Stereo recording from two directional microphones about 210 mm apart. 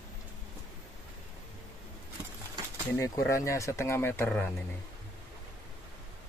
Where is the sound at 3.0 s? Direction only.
15° left (ahead or behind).